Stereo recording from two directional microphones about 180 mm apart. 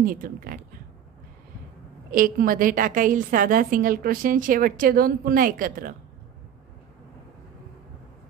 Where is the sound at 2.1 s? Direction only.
50° right (ahead or behind).